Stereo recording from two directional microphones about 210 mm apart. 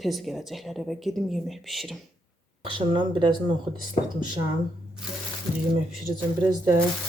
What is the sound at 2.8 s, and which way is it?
Speech, 20° right (ahead or behind).